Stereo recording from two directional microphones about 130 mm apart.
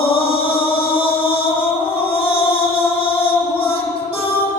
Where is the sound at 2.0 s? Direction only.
45° left (ahead or behind).